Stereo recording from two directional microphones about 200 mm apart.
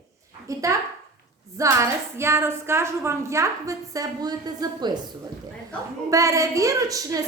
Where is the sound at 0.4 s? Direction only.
15° right (ahead or behind).